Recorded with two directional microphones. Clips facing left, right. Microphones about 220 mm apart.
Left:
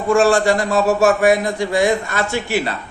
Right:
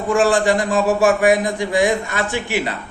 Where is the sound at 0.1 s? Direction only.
20° right (ahead or behind).